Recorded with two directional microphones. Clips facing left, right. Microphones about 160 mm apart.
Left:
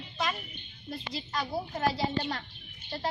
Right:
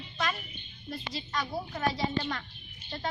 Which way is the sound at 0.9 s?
25° left (ahead or behind).